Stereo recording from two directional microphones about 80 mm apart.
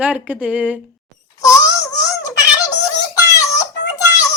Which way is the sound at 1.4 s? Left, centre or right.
Left.